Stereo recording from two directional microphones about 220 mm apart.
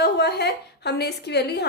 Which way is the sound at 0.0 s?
45° left (ahead or behind).